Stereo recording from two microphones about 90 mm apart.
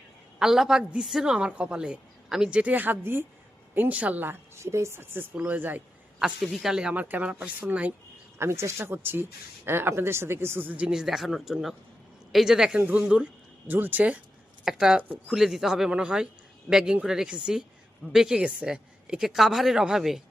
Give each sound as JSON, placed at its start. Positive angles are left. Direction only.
{"t": 0.3, "sound": "a woman's voice", "side_deg": -5}
{"t": 6.1, "sound": "a woman's voice", "side_deg": -5}
{"t": 8.4, "sound": "a woman's voice", "side_deg": -30}
{"t": 14.6, "sound": "a woman's voice", "side_deg": -5}